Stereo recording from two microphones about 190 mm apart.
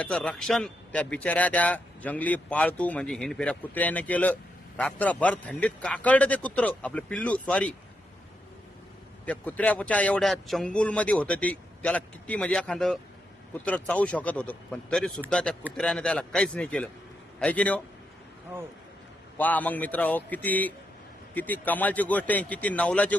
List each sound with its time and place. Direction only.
0.0 s speech: 5° left (ahead or behind)
9.2 s a man's voice: 10° left (ahead or behind)
19.4 s speech: 10° left (ahead or behind)